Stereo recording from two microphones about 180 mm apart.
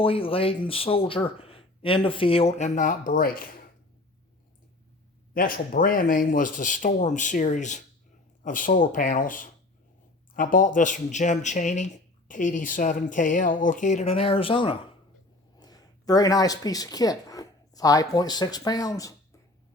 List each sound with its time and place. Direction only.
0.0 s speech: 30° left (ahead or behind); by 3.4 s 55° left (ahead or behind)
5.3 s speech: 50° left (ahead or behind); by 19.1 s 20° left (ahead or behind)